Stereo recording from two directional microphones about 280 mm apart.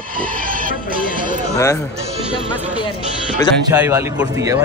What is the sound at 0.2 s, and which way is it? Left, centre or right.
Speech, right.